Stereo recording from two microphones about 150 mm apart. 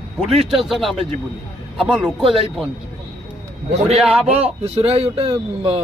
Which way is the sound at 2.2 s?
35° right (ahead or behind).